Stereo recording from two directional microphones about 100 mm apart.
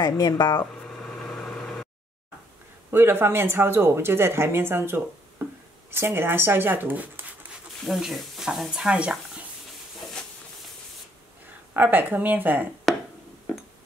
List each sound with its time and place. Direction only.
0.0 s speech: 45° left (ahead or behind)
0.8 s vehicle: 5° left (ahead or behind)
2.9 s speech: 25° right (ahead or behind)
7.8 s speech: centre (ahead or behind)
11.7 s speech: 20° right (ahead or behind)
12.9 s a sound: centre (ahead or behind)